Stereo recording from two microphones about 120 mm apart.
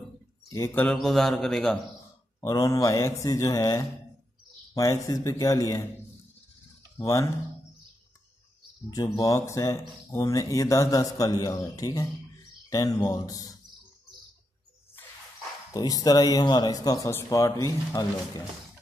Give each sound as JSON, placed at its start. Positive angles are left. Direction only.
{"t": 0.9, "sound": "a man's voice", "side_deg": 0}
{"t": 2.4, "sound": "speech", "side_deg": 30}
{"t": 7.0, "sound": "speech", "side_deg": 25}
{"t": 8.9, "sound": "speech", "side_deg": 30}
{"t": 15.7, "sound": "speech", "side_deg": 30}